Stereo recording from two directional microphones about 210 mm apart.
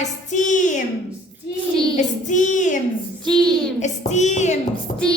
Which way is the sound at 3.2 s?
5° left (ahead or behind).